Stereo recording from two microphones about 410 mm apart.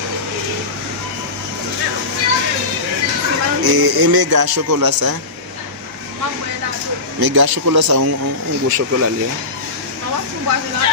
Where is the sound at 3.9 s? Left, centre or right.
Right.